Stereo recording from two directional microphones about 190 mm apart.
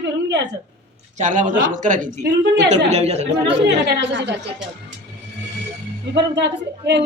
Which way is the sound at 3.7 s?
70° right (ahead or behind).